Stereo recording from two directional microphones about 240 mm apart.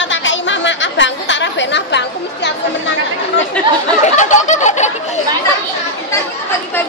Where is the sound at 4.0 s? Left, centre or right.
Left.